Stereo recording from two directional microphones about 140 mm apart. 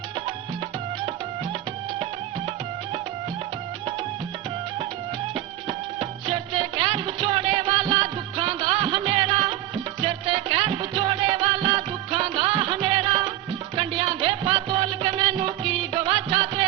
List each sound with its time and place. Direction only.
5.3 s music: 40° right (ahead or behind)